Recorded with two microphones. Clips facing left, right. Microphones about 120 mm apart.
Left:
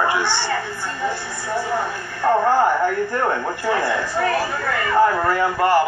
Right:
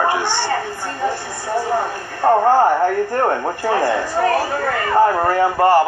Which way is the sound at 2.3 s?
40° right (ahead or behind).